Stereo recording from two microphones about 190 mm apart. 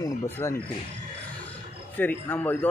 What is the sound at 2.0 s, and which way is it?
Speech, 10° left (ahead or behind).